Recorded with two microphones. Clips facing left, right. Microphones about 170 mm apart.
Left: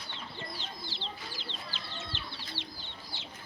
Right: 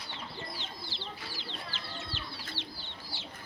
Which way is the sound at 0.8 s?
20° left (ahead or behind).